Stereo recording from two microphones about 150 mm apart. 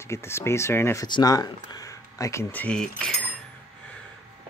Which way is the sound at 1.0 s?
30° left (ahead or behind).